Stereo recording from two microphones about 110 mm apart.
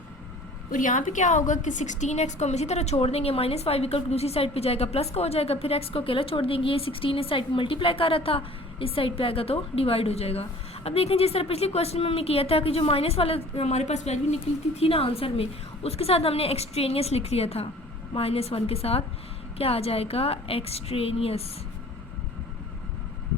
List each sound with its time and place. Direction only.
1.2 s a woman's voice: 90° left
14.8 s a woman's voice: 60° left (ahead or behind)